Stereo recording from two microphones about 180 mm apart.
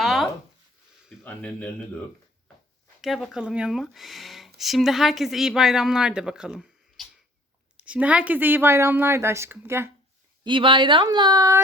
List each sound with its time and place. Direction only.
0.0 s a sound: centre (ahead or behind)
1.2 s speech: 10° left (ahead or behind)
3.0 s speech: centre (ahead or behind)
10.4 s speech: 25° right (ahead or behind)